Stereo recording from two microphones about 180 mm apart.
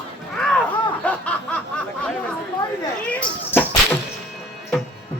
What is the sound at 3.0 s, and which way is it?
Children playing, 10° left (ahead or behind).